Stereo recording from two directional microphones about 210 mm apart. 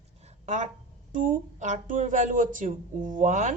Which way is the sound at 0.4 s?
35° right (ahead or behind).